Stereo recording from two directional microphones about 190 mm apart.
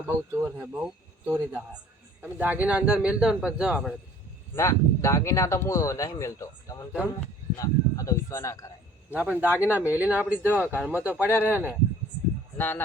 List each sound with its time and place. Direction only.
0.3 s speech: 10° right (ahead or behind)
4.5 s speech: 15° left (ahead or behind)
6.9 s speech: 5° right (ahead or behind)
7.5 s speech: 20° left (ahead or behind)
9.0 s a man's voice: 10° right (ahead or behind)
12.5 s speech: 10° left (ahead or behind)